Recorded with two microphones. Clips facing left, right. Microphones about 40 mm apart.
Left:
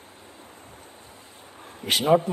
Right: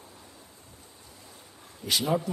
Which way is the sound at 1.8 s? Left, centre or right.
Left.